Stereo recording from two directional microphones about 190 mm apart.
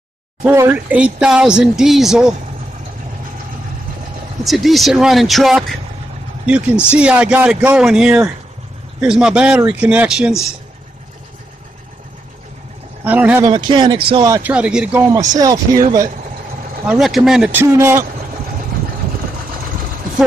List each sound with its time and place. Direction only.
0.4 s speech: 10° right (ahead or behind)
4.5 s speech: centre (ahead or behind)
7.0 s speech: 5° right (ahead or behind)
13.0 s speech: 10° right (ahead or behind)
13.4 s speech: 25° right (ahead or behind)
14.4 s speech: 5° right (ahead or behind)
16.8 s speech: centre (ahead or behind)